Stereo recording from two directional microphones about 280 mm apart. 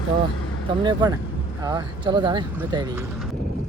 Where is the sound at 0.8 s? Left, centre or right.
Centre.